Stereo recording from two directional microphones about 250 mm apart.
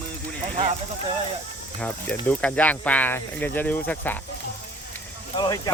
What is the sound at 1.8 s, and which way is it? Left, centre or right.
Speech, centre.